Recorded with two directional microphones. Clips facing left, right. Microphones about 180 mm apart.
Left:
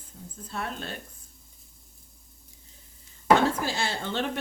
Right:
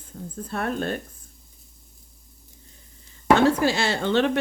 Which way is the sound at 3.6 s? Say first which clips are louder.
Right 8 dB; 75° right (ahead or behind).